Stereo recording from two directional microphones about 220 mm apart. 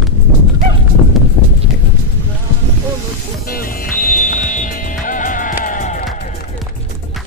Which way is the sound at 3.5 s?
40° left (ahead or behind).